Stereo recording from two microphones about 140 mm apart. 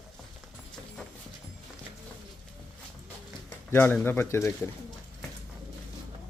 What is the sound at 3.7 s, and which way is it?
Speech, 15° left (ahead or behind).